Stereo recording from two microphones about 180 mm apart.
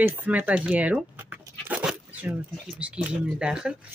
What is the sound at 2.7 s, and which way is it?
Speech, 5° right (ahead or behind).